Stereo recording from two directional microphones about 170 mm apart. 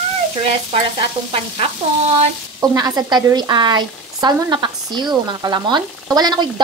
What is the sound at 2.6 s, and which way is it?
Speech, 20° right (ahead or behind).